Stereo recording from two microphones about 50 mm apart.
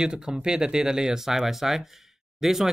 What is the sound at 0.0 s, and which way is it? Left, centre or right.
Speech, centre.